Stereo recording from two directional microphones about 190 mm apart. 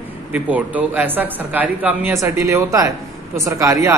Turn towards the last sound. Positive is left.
turn(degrees=-15)  # may be behind; listen again after turning